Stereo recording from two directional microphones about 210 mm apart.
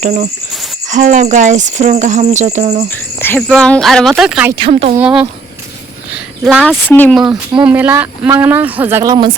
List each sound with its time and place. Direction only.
0.5 s cricket: centre (ahead or behind)
0.9 s speech: 35° right (ahead or behind)
3.2 s speech: 10° left (ahead or behind)
4.5 s speech: 25° right (ahead or behind)
4.9 s speech: 5° right (ahead or behind)
6.4 s speech: centre (ahead or behind)
7.6 s speech: 10° right (ahead or behind)